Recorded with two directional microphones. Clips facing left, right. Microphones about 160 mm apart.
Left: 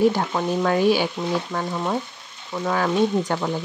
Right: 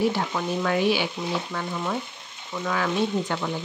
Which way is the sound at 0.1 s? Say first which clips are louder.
Left 4 dB; 40° left (ahead or behind).